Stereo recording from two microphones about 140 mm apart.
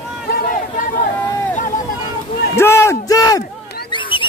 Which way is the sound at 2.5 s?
20° left (ahead or behind).